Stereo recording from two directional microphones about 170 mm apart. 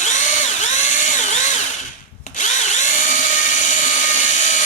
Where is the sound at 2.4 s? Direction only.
45° left (ahead or behind).